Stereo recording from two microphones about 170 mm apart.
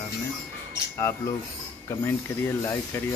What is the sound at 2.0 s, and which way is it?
Speech, 15° left (ahead or behind).